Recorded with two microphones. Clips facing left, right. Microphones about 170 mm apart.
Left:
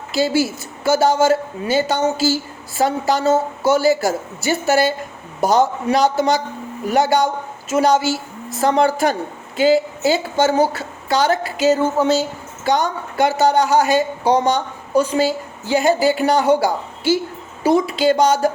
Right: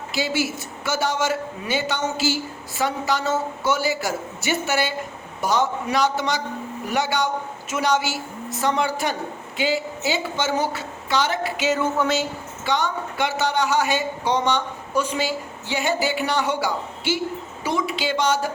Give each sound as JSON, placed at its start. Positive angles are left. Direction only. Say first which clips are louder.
{"t": 0.1, "sound": "a woman's voice", "louder": "left 7 dB", "side_deg": 35}